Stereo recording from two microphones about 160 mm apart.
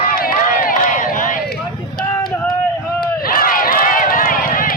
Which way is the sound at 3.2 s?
65° left (ahead or behind).